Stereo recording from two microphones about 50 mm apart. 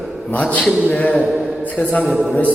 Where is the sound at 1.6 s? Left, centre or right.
Left.